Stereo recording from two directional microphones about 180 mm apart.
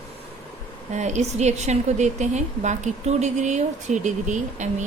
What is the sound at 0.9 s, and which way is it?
A woman's voice, 40° right (ahead or behind).